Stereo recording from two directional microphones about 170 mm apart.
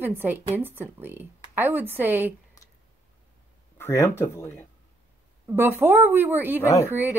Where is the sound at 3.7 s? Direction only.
15° left (ahead or behind).